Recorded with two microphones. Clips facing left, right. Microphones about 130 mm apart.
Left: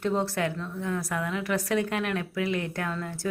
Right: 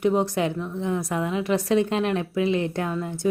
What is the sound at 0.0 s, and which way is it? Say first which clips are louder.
A woman's voice: right 5 dB; 15° right (ahead or behind).